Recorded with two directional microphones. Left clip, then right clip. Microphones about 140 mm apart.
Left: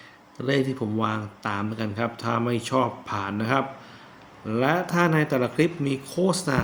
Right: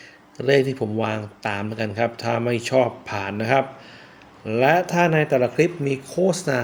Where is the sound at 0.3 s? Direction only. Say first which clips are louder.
Right 6 dB; 40° right (ahead or behind).